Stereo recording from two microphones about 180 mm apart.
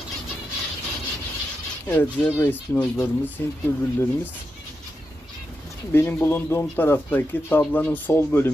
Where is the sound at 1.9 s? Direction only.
10° left (ahead or behind).